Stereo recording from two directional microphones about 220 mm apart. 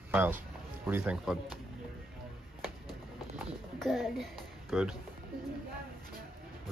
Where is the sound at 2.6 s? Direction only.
Centre (ahead or behind).